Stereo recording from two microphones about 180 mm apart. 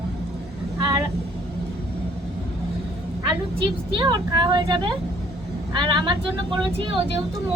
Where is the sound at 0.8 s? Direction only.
25° right (ahead or behind).